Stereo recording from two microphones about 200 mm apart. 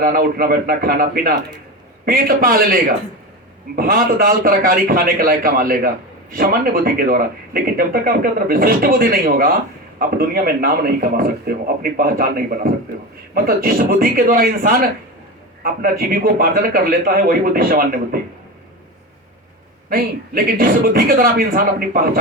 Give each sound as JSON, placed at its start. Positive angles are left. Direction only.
{"t": 0.0, "sound": "speech", "side_deg": -45}
{"t": 3.8, "sound": "speech", "side_deg": -45}
{"t": 19.9, "sound": "speech", "side_deg": -45}